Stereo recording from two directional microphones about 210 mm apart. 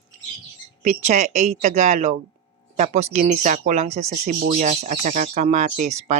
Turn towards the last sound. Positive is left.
turn(degrees=-35)  # may be behind; listen again after turning